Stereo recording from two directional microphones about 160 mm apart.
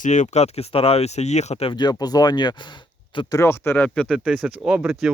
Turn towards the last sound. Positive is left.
turn(degrees=-5)  # may be behind; listen again after turning